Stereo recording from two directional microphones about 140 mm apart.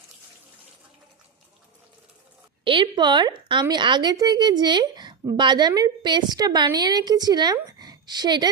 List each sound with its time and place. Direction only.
2.6 s a woman's voice: 35° right (ahead or behind)